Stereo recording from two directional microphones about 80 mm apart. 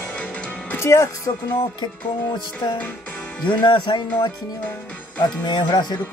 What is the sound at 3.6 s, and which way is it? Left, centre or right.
Speech, left.